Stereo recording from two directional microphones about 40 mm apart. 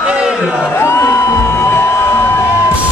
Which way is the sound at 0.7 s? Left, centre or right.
Left.